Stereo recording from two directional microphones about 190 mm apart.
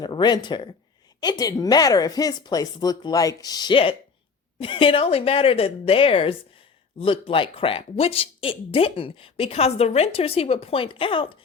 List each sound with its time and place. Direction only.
0.0 s speech: 25° left (ahead or behind)